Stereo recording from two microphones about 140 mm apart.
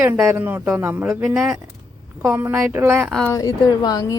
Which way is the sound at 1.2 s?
5° right (ahead or behind).